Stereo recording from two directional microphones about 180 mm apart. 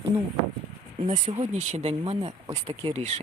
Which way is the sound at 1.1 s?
40° right (ahead or behind).